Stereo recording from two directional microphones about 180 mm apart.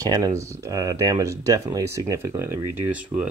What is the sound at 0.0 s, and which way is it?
Speech, 20° right (ahead or behind).